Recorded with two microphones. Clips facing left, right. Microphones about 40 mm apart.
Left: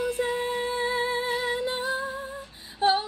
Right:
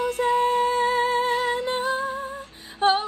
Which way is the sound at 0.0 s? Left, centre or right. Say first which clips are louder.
Right 6 dB; right.